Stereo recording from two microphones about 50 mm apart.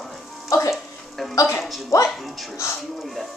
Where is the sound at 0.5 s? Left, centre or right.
Left.